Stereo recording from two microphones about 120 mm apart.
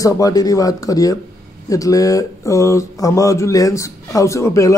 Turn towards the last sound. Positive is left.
turn(degrees=25)  # may be behind; listen again after turning